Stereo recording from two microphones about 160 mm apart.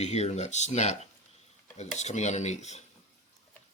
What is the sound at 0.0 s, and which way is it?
Speech, 45° left (ahead or behind).